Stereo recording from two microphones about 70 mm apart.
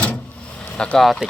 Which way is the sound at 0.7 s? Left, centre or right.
Centre.